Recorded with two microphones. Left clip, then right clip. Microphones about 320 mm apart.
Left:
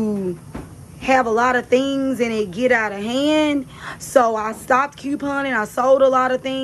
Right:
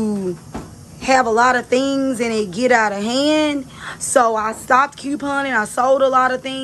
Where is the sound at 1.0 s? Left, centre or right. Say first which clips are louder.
Right 2 dB; centre.